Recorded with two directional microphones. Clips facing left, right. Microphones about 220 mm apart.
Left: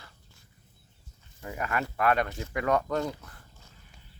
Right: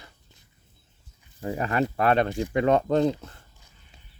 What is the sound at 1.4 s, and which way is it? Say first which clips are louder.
Speech: right 7 dB; 30° right (ahead or behind).